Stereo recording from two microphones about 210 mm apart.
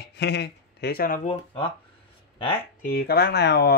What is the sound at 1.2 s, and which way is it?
Speech, 25° left (ahead or behind).